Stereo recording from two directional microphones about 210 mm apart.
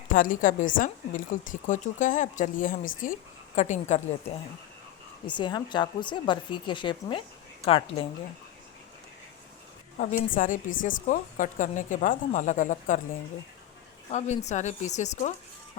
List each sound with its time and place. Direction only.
0.1 s a woman's voice: 40° left (ahead or behind)
5.2 s a woman's voice: 20° left (ahead or behind)
10.0 s a woman's voice: 40° left (ahead or behind)
14.1 s a woman's voice: 35° left (ahead or behind)